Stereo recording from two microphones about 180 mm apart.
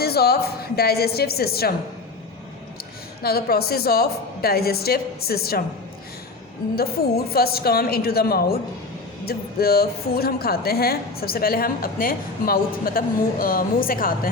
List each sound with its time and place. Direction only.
0.0 s a woman's voice: 60° left (ahead or behind)
3.2 s a woman's voice: 60° left (ahead or behind)
7.3 s a woman's voice: 60° left (ahead or behind)